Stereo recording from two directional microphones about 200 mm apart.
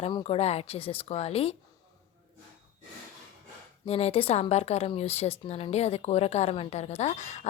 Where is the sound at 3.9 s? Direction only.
30° left (ahead or behind).